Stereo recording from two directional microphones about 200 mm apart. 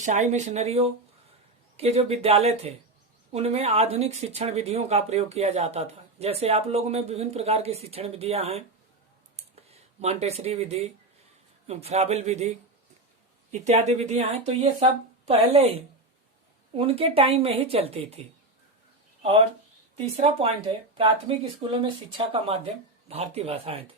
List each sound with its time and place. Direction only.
0.0 s speech: 35° right (ahead or behind)
9.3 s a sound: 30° right (ahead or behind)
11.7 s speech: 30° right (ahead or behind)
13.5 s speech: 35° right (ahead or behind)
20.1 s speech: 30° right (ahead or behind)